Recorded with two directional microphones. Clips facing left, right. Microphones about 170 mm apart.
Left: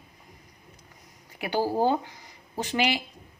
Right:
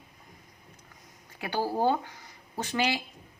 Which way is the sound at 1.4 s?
15° left (ahead or behind).